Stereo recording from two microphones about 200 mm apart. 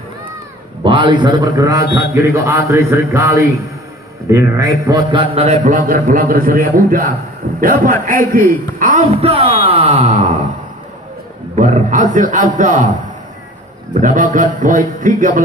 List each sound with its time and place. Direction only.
0.8 s a man's voice: 25° right (ahead or behind); by 9.0 s 40° right (ahead or behind)
9.2 s a man's voice: 30° right (ahead or behind)
9.7 s wail: 30° right (ahead or behind)
11.5 s a man's voice: 40° right (ahead or behind)
14.0 s a man's voice: 40° right (ahead or behind)